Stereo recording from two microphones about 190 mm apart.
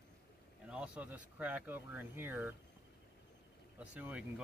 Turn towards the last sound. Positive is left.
turn(degrees=-5)  # may be behind; listen again after turning